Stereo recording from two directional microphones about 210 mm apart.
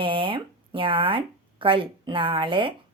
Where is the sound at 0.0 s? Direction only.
25° right (ahead or behind).